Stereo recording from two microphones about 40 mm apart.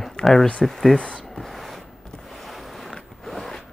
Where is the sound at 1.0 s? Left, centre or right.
Left.